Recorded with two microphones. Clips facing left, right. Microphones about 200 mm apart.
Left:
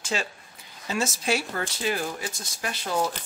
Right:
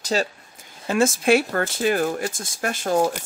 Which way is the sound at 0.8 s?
50° right (ahead or behind).